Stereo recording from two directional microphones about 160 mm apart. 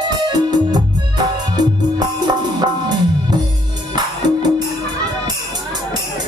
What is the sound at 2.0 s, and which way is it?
Music, 25° right (ahead or behind).